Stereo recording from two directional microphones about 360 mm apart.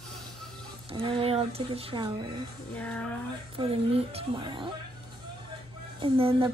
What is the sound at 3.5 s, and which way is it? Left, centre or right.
Speech, centre.